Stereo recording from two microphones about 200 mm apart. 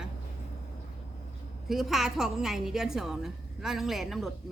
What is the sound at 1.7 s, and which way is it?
A woman's voice, centre (ahead or behind).